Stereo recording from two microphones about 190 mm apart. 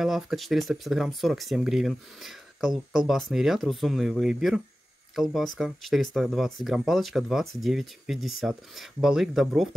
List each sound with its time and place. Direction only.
0.0 s speech: centre (ahead or behind)